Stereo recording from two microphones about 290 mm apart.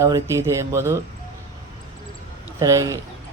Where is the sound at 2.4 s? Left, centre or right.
Centre.